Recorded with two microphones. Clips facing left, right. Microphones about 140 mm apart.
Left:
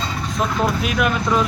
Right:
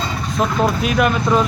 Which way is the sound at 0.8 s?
Centre (ahead or behind).